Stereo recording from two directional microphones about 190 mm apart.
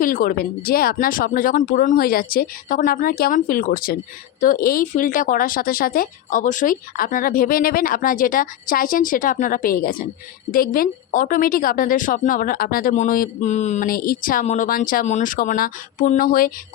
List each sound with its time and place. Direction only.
0.0 s a woman's voice: 50° left (ahead or behind)